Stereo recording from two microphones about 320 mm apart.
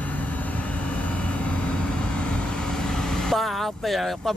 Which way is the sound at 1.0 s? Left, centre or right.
Centre.